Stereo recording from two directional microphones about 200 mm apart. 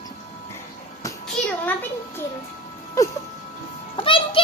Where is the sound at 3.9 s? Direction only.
25° left (ahead or behind).